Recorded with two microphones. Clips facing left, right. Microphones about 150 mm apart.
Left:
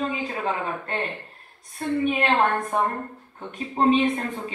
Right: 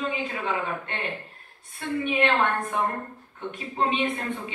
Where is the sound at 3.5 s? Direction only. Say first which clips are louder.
Left 6 dB; 40° left (ahead or behind).